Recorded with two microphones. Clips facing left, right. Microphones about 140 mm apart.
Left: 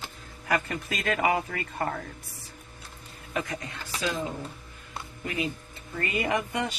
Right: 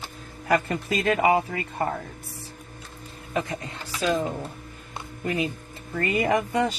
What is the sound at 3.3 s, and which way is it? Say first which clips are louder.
Speech: right 3 dB; 25° right (ahead or behind).